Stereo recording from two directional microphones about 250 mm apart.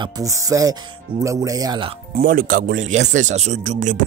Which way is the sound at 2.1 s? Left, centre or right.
Right.